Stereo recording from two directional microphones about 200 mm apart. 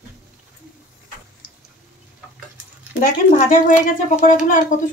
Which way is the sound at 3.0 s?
40° left (ahead or behind).